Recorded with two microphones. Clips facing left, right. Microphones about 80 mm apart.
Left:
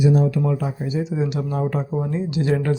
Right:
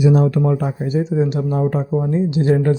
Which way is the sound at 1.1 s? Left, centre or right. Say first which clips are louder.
Right 5 dB; right.